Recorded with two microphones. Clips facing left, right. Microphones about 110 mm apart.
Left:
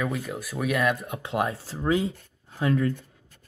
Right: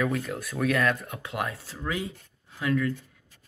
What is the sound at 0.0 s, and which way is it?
Speech, 5° left (ahead or behind).